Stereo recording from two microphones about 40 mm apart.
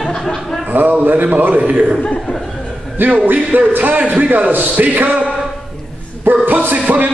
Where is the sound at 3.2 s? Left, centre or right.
Right.